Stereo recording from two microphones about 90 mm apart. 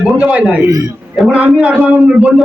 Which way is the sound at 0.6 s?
40° right (ahead or behind).